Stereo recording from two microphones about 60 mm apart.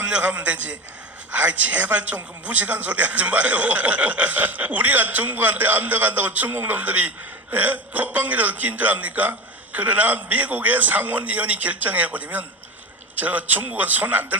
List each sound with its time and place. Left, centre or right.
0.0 s a man's voice: centre